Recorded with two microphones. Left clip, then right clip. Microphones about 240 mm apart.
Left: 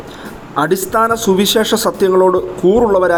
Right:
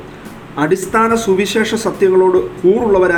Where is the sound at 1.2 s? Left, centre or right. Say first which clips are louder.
Left 1 dB; left.